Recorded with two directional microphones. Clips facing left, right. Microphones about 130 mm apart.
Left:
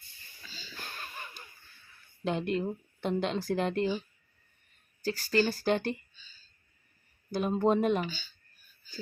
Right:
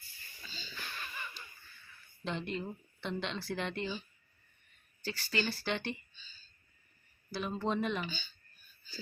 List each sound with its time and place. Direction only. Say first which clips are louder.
0.4 s a sound: even; centre (ahead or behind)
0.8 s a sound: left 1 dB; 40° left (ahead or behind)
2.2 s speech: left 7 dB; 50° left (ahead or behind)
5.0 s a woman's voice: left 8 dB; 40° left (ahead or behind)
7.3 s speech: left 8 dB; 45° left (ahead or behind)
8.0 s speech: left 4 dB; 5° left (ahead or behind)